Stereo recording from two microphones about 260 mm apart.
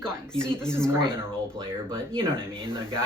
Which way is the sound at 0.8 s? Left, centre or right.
Centre.